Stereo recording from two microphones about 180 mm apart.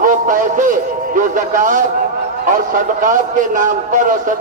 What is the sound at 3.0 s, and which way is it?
A man's voice, 45° right (ahead or behind).